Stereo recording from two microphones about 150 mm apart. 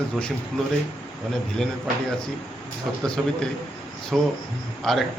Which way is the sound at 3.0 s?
5° left (ahead or behind).